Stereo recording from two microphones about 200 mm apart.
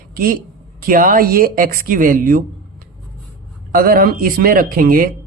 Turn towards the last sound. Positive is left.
turn(degrees=-45)  # may be behind; listen again after turning